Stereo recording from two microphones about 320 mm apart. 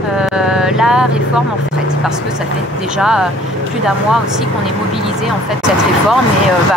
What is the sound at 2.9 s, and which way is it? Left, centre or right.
Speech, centre.